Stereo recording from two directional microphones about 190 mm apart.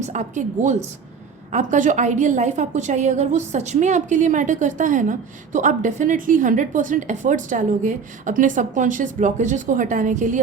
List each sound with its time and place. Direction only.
0.0 s a woman's voice: 40° right (ahead or behind)